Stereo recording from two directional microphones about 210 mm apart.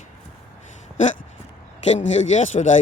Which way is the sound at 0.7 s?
35° left (ahead or behind).